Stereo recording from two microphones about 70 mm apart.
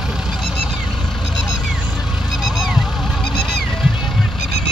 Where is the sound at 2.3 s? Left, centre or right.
Centre.